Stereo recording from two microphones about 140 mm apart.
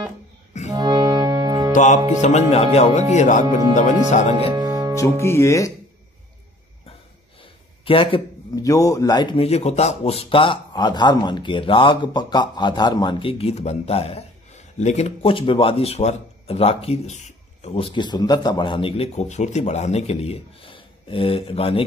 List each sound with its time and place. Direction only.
0.7 s music: 30° right (ahead or behind)
1.7 s music: 60° left (ahead or behind)
2.5 s speech: 50° left (ahead or behind)
4.6 s music: 25° right (ahead or behind)
5.2 s speech: 20° left (ahead or behind)
7.8 s speech: 40° left (ahead or behind)
8.5 s speech: 25° left (ahead or behind)
9.4 s speech: 50° left (ahead or behind)